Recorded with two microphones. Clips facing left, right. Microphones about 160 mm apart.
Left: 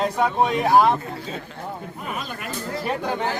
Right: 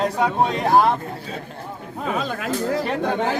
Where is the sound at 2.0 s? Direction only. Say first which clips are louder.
Right 9 dB; 90° right.